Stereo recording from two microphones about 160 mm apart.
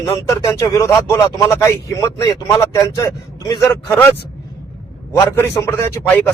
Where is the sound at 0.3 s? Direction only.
20° left (ahead or behind).